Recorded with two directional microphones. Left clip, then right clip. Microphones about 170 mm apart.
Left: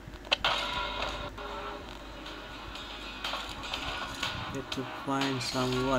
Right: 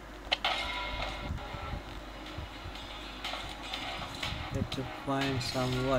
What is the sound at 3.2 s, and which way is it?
Music, 45° left (ahead or behind).